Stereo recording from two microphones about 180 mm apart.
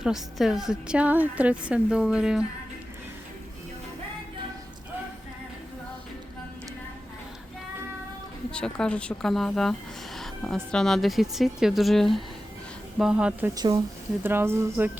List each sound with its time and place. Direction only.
0.0 s a woman's voice: centre (ahead or behind)
8.5 s a woman's voice: 5° left (ahead or behind)
13.5 s speech: 20° right (ahead or behind)